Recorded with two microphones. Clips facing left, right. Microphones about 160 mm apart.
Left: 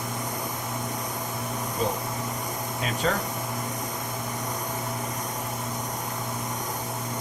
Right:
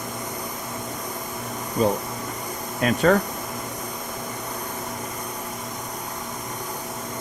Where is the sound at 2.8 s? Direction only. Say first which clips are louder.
Right 9 dB; 55° right (ahead or behind).